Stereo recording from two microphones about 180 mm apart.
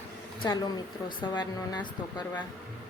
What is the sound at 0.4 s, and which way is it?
Speech, 25° left (ahead or behind).